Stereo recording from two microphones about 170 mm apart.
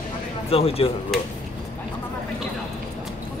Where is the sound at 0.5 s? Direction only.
35° left (ahead or behind).